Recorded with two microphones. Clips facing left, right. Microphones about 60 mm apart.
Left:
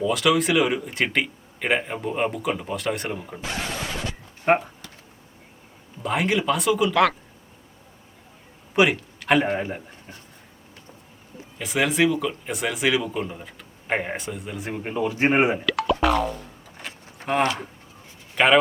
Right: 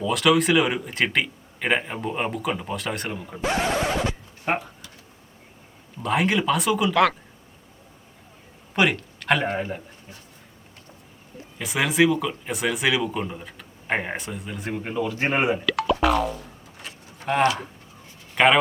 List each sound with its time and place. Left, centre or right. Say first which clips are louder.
0.1 s speech: right 3 dB; centre
3.4 s a sound: right 8 dB; right
3.7 s scratch: right 7 dB; right
4.4 s a sound: left 6 dB; left
6.0 s speech: right 1 dB; centre
8.7 s a man's voice: left 2 dB; centre
11.5 s speech: even; centre
14.9 s speech: left 4 dB; left
15.6 s boing: even; centre
18.3 s speech: even; centre